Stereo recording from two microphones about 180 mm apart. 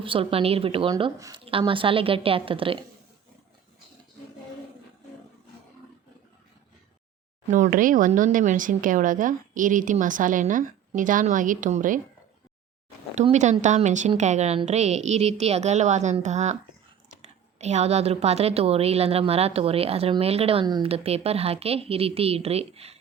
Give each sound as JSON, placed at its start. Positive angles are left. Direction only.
{"t": 0.0, "sound": "a woman's voice", "side_deg": -30}
{"t": 7.5, "sound": "speech", "side_deg": -45}
{"t": 13.1, "sound": "speech", "side_deg": -40}
{"t": 17.6, "sound": "speech", "side_deg": -40}